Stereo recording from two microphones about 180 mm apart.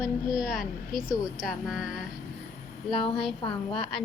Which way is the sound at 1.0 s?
20° left (ahead or behind).